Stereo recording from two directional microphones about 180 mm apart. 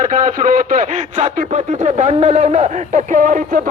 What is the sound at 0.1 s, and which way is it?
Speech, 45° right (ahead or behind).